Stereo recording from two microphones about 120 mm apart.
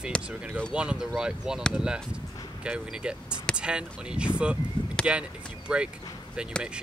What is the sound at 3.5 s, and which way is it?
Speech, 10° right (ahead or behind).